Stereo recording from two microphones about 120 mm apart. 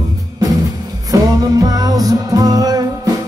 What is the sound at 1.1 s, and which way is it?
Music, 30° right (ahead or behind).